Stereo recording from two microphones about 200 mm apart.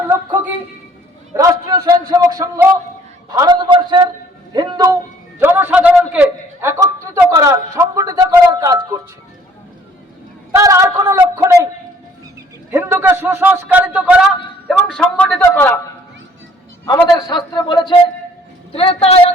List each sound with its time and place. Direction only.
1.3 s a man's voice: 15° right (ahead or behind)
10.5 s a man's voice: 15° right (ahead or behind)
12.7 s a man's voice: 10° right (ahead or behind); by 15.8 s 10° left (ahead or behind)
17.1 s a man's voice: 20° left (ahead or behind)